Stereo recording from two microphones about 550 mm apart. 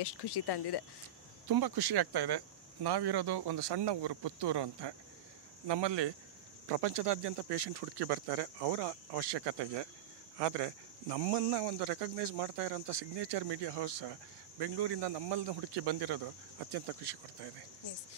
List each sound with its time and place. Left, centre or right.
0.0 s speech: left
1.5 s speech: right